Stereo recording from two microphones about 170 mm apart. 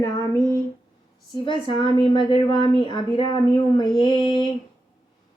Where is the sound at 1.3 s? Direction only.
25° left (ahead or behind).